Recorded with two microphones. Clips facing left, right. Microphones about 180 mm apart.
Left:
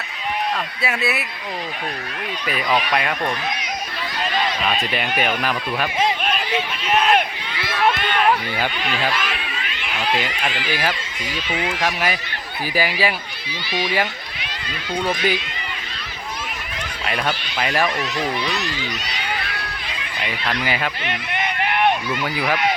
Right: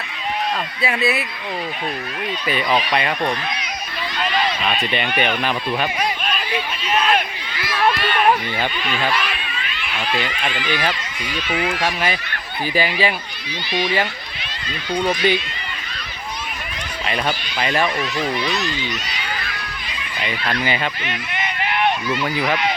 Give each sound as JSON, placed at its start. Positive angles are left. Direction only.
{"t": 0.8, "sound": "speech", "side_deg": 0}
{"t": 2.5, "sound": "speech", "side_deg": 0}
{"t": 4.7, "sound": "speech", "side_deg": 0}
{"t": 7.6, "sound": "run", "side_deg": 25}
{"t": 10.2, "sound": "speech", "side_deg": 5}
{"t": 17.6, "sound": "speech", "side_deg": 5}
{"t": 20.2, "sound": "speech", "side_deg": 5}
{"t": 21.0, "sound": "a sound", "side_deg": 60}
{"t": 22.4, "sound": "speech", "side_deg": 10}